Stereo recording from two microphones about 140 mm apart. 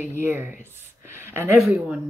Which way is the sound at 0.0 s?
15° right (ahead or behind).